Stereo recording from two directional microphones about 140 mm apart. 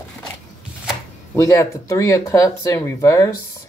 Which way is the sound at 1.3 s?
20° left (ahead or behind).